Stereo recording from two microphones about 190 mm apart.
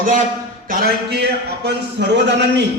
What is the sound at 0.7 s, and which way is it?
A man's voice, 55° right (ahead or behind).